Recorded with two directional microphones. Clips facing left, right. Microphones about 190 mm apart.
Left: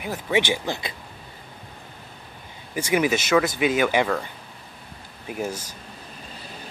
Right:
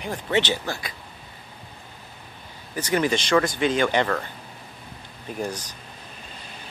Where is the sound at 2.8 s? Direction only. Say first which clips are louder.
Left 1 dB; 10° left (ahead or behind).